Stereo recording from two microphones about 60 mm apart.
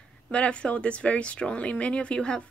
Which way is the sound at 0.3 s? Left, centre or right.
Centre.